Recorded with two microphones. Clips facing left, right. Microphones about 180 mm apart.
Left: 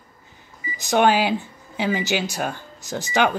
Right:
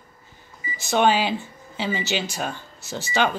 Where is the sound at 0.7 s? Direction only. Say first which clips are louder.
Left 2 dB; 15° left (ahead or behind).